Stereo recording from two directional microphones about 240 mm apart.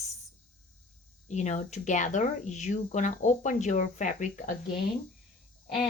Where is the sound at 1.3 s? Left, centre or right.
Left.